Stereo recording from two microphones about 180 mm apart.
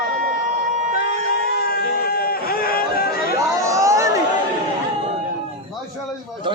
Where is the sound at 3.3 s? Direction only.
15° right (ahead or behind).